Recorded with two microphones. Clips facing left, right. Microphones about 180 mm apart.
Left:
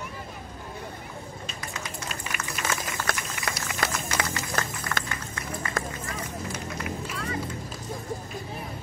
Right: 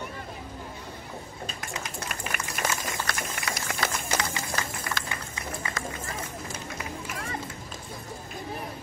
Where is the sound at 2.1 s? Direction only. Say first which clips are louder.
Right 1 dB; 50° right (ahead or behind).